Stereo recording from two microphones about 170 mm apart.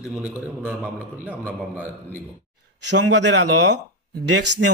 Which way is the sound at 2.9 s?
90° right.